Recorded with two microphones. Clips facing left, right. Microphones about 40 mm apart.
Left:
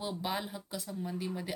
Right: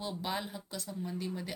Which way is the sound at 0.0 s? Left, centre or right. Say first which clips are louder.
Left 1 dB; centre.